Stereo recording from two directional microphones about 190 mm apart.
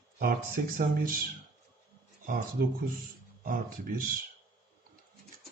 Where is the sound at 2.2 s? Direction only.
50° right (ahead or behind).